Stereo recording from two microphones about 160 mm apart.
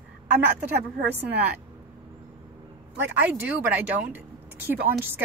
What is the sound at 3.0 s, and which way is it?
Speech, 10° right (ahead or behind).